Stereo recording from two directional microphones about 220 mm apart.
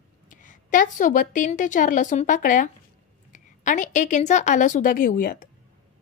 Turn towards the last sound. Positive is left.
turn(degrees=40)  # may be behind; listen again after turning